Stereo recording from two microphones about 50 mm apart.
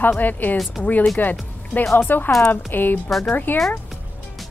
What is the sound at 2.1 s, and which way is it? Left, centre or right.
Speech, left.